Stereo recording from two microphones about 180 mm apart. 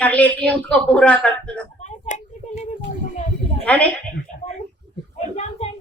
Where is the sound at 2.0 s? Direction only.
40° left (ahead or behind).